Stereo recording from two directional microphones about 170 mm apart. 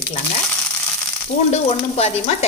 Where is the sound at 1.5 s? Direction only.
35° left (ahead or behind).